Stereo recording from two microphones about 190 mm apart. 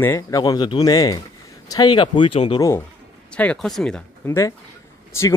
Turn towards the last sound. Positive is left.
turn(degrees=15)  # may be behind; listen again after turning